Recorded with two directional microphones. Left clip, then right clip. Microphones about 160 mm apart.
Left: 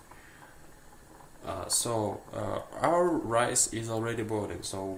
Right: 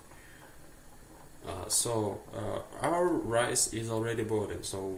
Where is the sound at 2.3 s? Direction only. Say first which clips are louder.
Left 3 dB; 35° left (ahead or behind).